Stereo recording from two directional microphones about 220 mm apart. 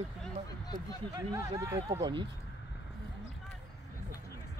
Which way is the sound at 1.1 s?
15° right (ahead or behind).